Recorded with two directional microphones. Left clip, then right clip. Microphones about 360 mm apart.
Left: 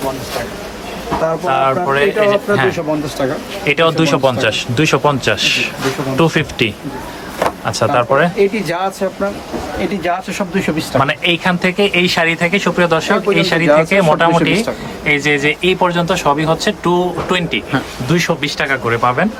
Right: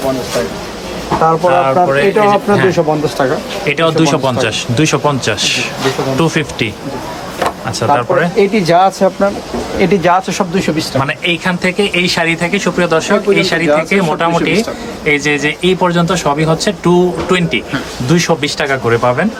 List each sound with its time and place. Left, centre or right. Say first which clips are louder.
1.5 s a man's voice: right 1 dB; centre
7.8 s a man's voice: right 1 dB; centre
8.4 s speech: right 6 dB; right
10.0 s a man's voice: right 7 dB; centre